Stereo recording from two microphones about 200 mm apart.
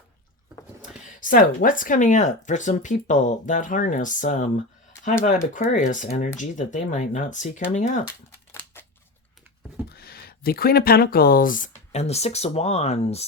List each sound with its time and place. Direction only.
0.8 s speech: 40° left (ahead or behind)
5.5 s speech: 40° left (ahead or behind)
9.9 s speech: 50° left (ahead or behind); by 13.2 s 30° left (ahead or behind)